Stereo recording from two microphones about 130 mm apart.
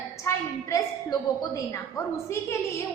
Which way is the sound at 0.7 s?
25° left (ahead or behind).